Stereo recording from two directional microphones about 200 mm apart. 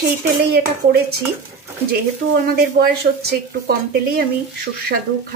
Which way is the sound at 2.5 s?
50° right (ahead or behind).